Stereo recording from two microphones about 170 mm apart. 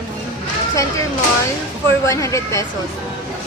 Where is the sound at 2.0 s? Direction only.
20° left (ahead or behind).